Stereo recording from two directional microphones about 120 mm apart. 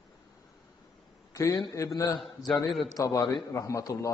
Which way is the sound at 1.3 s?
25° left (ahead or behind).